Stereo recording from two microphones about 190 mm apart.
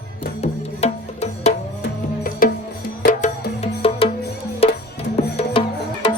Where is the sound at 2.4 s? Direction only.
45° left (ahead or behind); by 5.6 s 30° left (ahead or behind).